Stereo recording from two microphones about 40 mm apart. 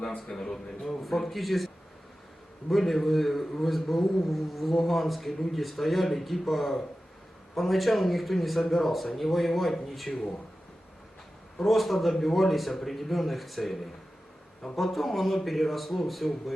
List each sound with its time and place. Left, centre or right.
0.3 s a man's voice: centre
0.5 s a man's voice: centre
11.6 s a man's voice: centre